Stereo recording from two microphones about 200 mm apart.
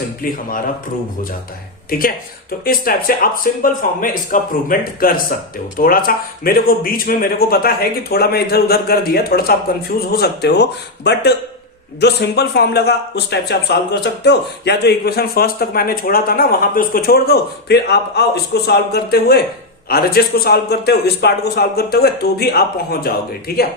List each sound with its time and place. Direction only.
1.9 s speech: 45° left (ahead or behind)